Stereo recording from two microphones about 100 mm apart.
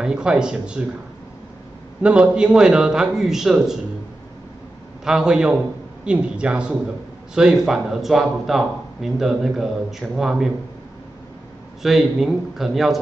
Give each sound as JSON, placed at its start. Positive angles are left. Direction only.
{"t": 0.0, "sound": "a man's voice", "side_deg": -10}
{"t": 2.0, "sound": "a man's voice", "side_deg": -10}
{"t": 5.0, "sound": "a man's voice", "side_deg": -5}
{"t": 11.8, "sound": "speech", "side_deg": -5}